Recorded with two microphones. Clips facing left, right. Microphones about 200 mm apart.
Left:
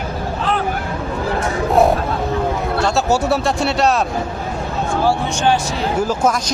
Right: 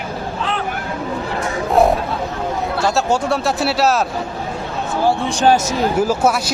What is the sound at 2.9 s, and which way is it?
Speech, 5° left (ahead or behind).